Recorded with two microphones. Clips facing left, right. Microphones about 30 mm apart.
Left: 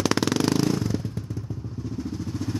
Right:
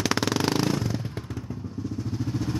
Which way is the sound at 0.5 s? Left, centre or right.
Right.